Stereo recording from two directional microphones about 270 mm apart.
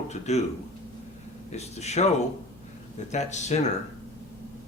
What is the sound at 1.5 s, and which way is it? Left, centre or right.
Speech, left.